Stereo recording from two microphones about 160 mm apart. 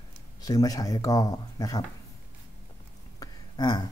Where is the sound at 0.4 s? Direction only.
20° left (ahead or behind).